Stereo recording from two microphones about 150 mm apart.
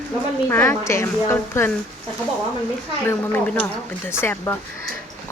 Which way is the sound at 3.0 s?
15° left (ahead or behind).